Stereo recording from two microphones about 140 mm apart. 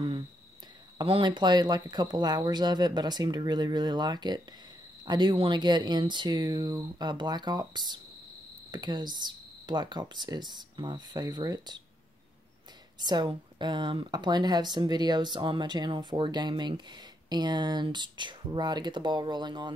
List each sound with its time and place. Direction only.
1.0 s a woman's voice: 40° right (ahead or behind)
13.0 s a woman's voice: 30° right (ahead or behind)